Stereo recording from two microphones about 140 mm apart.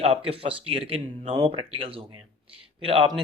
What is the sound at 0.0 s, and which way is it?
Speech, 45° right (ahead or behind).